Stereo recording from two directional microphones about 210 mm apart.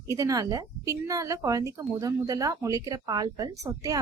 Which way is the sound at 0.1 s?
15° right (ahead or behind).